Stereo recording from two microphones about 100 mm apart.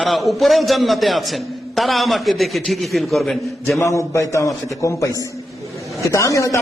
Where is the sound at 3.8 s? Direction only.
30° left (ahead or behind).